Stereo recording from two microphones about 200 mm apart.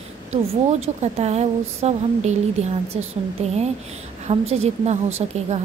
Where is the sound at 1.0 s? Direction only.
35° right (ahead or behind).